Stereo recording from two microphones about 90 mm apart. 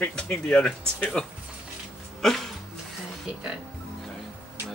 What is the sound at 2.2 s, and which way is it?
Dog, 5° left (ahead or behind).